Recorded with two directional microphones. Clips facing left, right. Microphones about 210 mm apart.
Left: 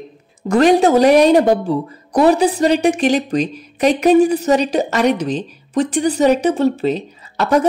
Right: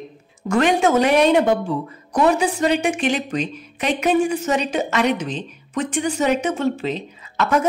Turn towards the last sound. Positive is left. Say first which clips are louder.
# left 4 dB
turn(degrees=35)  # may be behind; listen again after turning